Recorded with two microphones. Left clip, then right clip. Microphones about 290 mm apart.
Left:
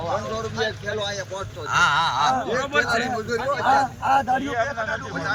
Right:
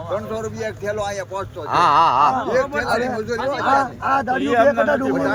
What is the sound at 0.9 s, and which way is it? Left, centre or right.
A man's voice, centre.